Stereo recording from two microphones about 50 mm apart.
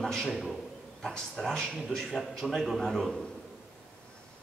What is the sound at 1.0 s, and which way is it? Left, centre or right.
A man's voice, centre.